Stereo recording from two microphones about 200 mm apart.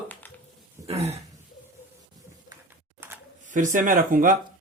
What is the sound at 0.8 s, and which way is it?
Speech, 30° right (ahead or behind).